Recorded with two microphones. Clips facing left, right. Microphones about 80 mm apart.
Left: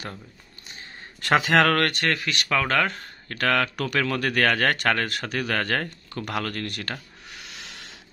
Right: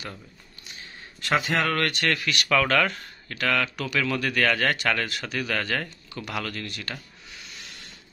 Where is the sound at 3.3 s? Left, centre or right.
Left.